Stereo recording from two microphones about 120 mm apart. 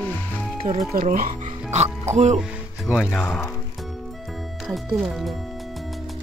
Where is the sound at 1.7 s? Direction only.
75° right (ahead or behind).